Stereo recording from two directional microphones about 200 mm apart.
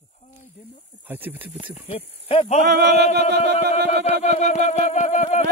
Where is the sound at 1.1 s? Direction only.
10° right (ahead or behind).